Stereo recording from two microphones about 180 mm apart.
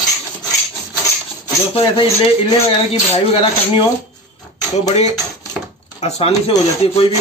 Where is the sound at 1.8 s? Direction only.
30° left (ahead or behind).